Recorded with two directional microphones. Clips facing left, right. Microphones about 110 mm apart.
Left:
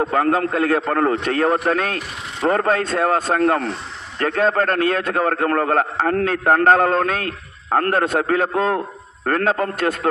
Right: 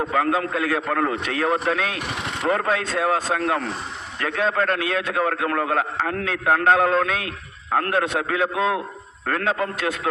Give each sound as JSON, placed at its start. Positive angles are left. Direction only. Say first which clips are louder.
{"t": 0.1, "sound": "a man's voice", "louder": "left 3 dB", "side_deg": 45}
{"t": 0.8, "sound": "a man's voice", "louder": "left 4 dB", "side_deg": 35}
{"t": 1.2, "sound": "a man's voice", "louder": "left 4 dB", "side_deg": 50}